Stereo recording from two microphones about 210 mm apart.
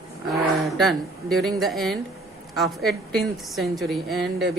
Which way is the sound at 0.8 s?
Centre (ahead or behind).